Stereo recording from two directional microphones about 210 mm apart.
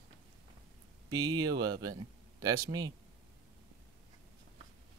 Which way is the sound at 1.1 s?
20° right (ahead or behind).